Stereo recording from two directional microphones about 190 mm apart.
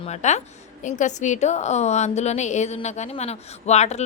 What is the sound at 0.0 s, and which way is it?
A woman's voice, 35° left (ahead or behind).